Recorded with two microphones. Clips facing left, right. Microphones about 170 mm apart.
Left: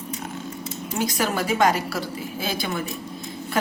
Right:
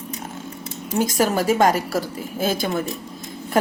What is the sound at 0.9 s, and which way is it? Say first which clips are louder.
A woman's voice: right 5 dB; 45° right (ahead or behind).